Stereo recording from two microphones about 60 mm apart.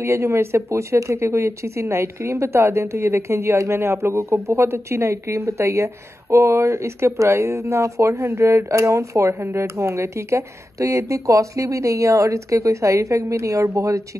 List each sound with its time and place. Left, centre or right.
0.0 s speech: right